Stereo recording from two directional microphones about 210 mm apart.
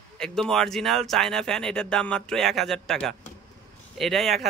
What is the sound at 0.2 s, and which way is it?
A man's voice, centre (ahead or behind).